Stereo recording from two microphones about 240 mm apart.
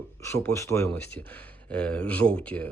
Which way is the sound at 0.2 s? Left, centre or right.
Centre.